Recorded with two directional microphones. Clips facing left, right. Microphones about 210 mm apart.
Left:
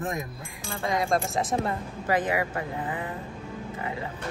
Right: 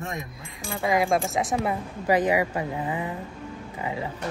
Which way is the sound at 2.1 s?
15° right (ahead or behind).